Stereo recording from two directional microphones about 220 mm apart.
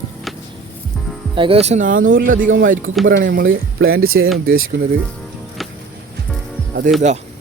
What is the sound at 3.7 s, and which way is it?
Speech, 65° right (ahead or behind).